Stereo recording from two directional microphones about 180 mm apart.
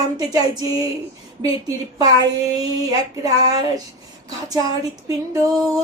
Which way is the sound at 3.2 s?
20° right (ahead or behind).